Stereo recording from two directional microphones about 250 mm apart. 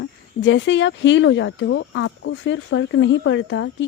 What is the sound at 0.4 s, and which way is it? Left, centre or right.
Speech, left.